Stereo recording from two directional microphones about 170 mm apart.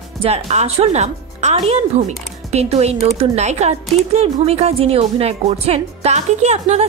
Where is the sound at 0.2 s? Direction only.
40° right (ahead or behind).